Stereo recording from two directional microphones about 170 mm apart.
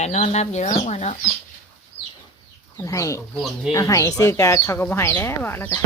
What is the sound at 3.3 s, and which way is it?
Speech, centre (ahead or behind).